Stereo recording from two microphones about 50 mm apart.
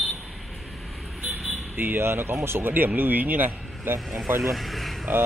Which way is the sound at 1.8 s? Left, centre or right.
Right.